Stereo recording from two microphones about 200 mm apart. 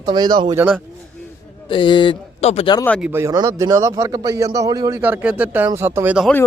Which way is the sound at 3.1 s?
15° right (ahead or behind).